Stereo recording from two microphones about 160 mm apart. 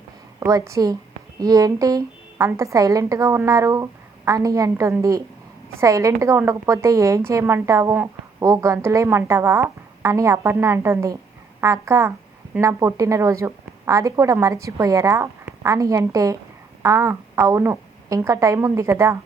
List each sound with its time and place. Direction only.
0.3 s a woman's voice: 20° right (ahead or behind)